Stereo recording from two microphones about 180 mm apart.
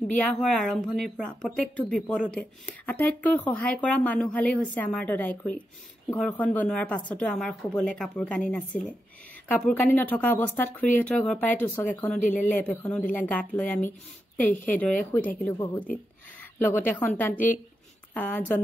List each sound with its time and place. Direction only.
0.2 s speech: 5° left (ahead or behind)
14.5 s speech: 45° left (ahead or behind)
15.1 s speech: 10° left (ahead or behind)